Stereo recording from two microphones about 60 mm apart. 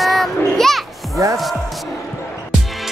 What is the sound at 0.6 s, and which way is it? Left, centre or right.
Children playing, centre.